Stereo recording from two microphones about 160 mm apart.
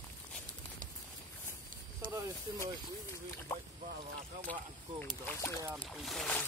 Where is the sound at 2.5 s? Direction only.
25° right (ahead or behind).